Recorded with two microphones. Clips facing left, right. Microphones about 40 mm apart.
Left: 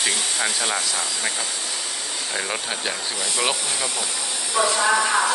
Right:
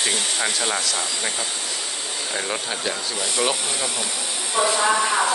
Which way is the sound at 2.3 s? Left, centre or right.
Centre.